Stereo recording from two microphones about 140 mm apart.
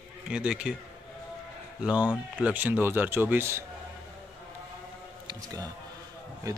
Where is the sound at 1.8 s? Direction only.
10° right (ahead or behind).